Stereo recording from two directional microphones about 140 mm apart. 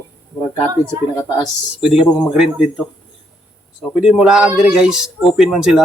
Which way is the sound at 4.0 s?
Centre (ahead or behind).